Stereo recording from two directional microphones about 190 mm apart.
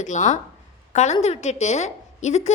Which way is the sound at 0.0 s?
40° left (ahead or behind).